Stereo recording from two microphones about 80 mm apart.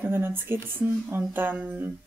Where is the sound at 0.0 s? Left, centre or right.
Right.